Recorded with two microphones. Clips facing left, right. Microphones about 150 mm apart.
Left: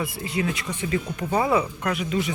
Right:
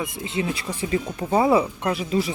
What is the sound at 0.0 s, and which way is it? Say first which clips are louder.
Speech: even; 20° right (ahead or behind).